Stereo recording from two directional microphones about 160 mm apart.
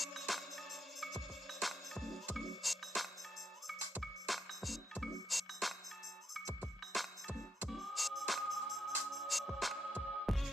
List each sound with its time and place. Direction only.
0.0 s music: centre (ahead or behind)